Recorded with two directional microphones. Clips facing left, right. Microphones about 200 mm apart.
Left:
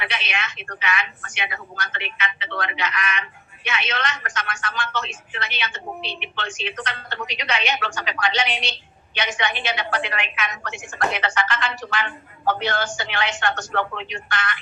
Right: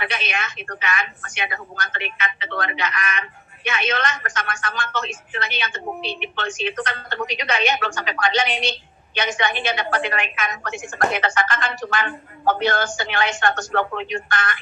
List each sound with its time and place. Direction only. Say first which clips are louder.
0.0 s a woman's voice: right 2 dB; 45° right (ahead or behind)